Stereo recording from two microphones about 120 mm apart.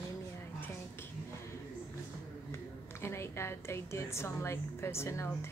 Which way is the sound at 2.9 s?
20° left (ahead or behind).